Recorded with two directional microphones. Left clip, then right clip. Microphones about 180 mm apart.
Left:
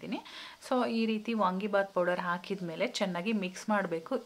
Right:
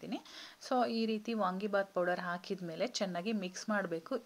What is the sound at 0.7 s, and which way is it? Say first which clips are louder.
Speech: left 2 dB; 25° right (ahead or behind).